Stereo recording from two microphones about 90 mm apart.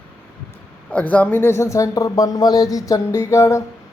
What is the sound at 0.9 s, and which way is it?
Speech, 15° left (ahead or behind).